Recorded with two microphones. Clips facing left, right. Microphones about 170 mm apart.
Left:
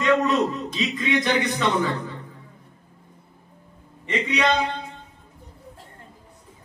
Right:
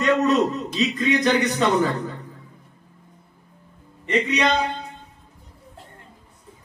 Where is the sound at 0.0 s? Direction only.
40° right (ahead or behind).